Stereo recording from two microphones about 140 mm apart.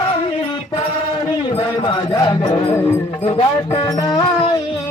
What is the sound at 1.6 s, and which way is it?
A man's voice, 35° left (ahead or behind).